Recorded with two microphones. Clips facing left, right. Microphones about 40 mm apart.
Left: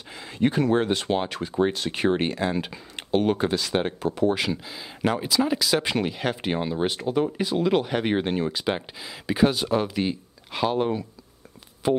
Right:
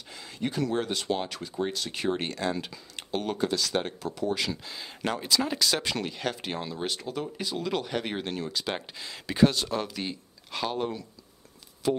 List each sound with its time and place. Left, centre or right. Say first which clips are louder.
0.1 s speech: left 9 dB; left
2.2 s speech: left 5 dB; left
4.6 s speech: left 6 dB; centre
5.9 s speech: left 5 dB; centre
8.7 s speech: left 3 dB; centre
11.8 s speech: left 5 dB; left